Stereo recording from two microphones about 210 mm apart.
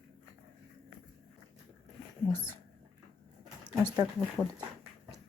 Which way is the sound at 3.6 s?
15° right (ahead or behind).